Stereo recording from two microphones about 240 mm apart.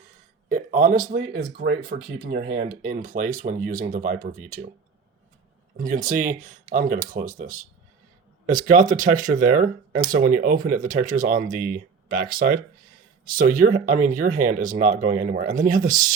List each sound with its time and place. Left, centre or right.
0.4 s speech: right
5.8 s speech: right